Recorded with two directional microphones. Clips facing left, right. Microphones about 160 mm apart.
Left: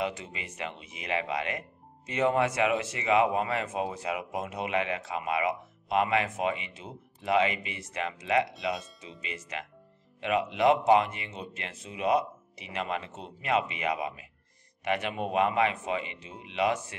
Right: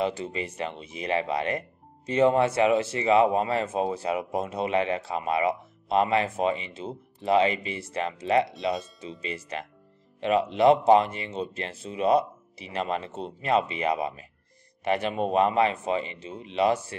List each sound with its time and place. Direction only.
0.0 s speech: 30° right (ahead or behind)